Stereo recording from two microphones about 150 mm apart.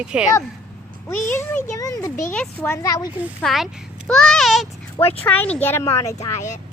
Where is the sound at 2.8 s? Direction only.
25° left (ahead or behind).